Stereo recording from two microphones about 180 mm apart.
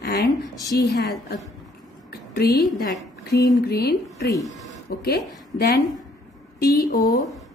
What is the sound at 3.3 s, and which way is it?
Speech, 20° left (ahead or behind).